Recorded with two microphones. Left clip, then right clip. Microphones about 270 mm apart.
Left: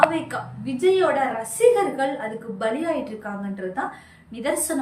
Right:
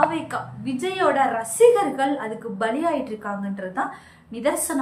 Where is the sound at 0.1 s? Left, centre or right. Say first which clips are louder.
Even; centre.